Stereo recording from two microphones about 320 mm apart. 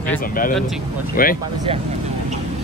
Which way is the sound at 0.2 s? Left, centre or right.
Left.